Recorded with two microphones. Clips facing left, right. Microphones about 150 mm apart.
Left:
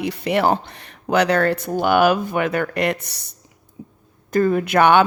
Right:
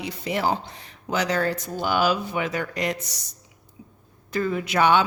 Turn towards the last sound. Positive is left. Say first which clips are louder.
# left 5 dB
turn(degrees=60)  # may be behind; listen again after turning